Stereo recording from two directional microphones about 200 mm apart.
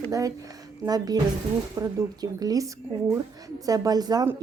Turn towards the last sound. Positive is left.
turn(degrees=-20)  # may be behind; listen again after turning